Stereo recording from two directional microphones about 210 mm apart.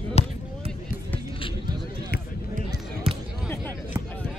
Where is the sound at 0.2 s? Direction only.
30° left (ahead or behind).